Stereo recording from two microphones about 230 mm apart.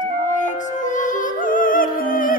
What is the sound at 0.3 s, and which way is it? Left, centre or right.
Music, left.